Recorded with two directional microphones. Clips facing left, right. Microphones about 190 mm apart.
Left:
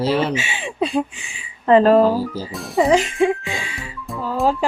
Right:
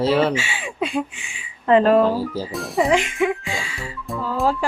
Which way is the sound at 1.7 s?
35° left (ahead or behind).